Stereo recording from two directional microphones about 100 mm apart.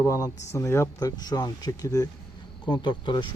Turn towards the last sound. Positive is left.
turn(degrees=50)  # may be behind; listen again after turning